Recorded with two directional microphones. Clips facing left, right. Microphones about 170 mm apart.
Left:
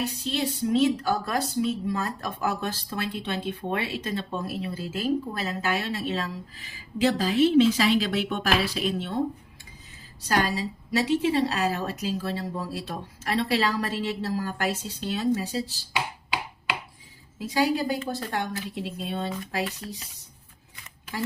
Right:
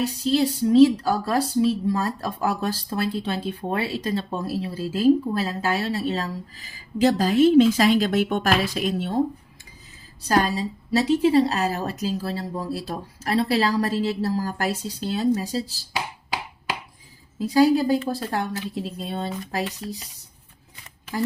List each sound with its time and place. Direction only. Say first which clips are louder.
0.0 s a woman's voice: right 7 dB; 35° right (ahead or behind)
10.2 s a woman's voice: right 4 dB; 35° right (ahead or behind)
17.4 s a woman's voice: right 7 dB; 35° right (ahead or behind)